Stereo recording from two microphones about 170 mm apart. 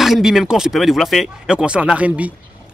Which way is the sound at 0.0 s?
Centre (ahead or behind).